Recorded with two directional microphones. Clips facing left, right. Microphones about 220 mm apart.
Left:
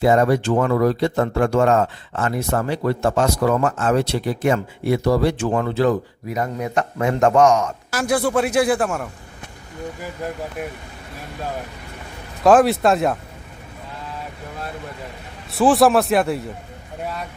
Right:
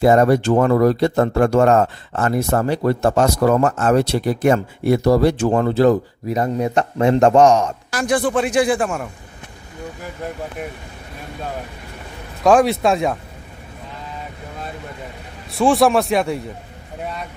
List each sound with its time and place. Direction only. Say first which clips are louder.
0.0 s speech: right 3 dB; 45° right (ahead or behind)
7.9 s a man's voice: even; 5° left (ahead or behind)
12.4 s a man's voice: even; centre (ahead or behind)
15.5 s a man's voice: even; centre (ahead or behind)